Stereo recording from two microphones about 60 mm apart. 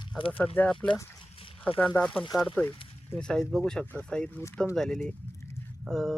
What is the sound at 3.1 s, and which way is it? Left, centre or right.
Speech, centre.